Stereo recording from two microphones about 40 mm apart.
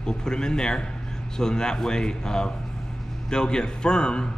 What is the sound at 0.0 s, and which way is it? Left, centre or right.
A man's voice, centre.